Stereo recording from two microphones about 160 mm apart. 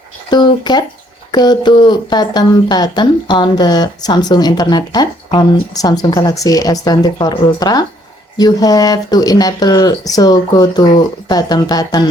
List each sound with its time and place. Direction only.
0.3 s speech: 25° left (ahead or behind)